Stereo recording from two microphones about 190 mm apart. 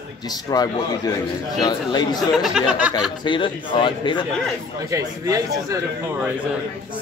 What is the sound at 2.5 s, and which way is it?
Speech, 5° right (ahead or behind).